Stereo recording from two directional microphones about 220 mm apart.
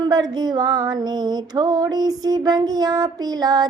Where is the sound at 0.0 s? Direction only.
20° right (ahead or behind).